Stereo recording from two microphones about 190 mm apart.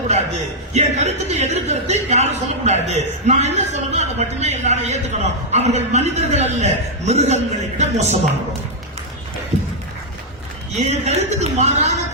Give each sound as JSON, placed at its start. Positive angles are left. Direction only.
{"t": 0.7, "sound": "a man's voice", "side_deg": -35}
{"t": 9.5, "sound": "a sound", "side_deg": -70}
{"t": 11.0, "sound": "a man's voice", "side_deg": -35}